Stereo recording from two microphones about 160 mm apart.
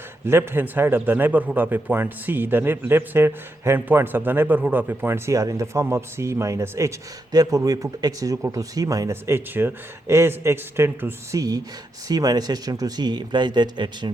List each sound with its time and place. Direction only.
0.3 s a man's voice: 15° right (ahead or behind)